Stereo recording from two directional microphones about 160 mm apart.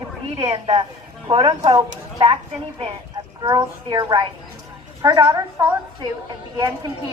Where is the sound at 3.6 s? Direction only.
25° right (ahead or behind).